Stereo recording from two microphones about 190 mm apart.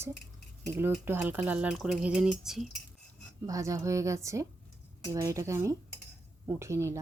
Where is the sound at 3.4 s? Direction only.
15° right (ahead or behind).